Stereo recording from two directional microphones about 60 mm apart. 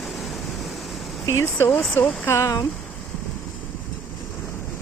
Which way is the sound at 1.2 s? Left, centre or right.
Left.